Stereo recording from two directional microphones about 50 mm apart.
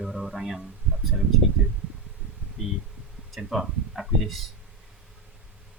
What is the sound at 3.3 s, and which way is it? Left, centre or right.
Speech, centre.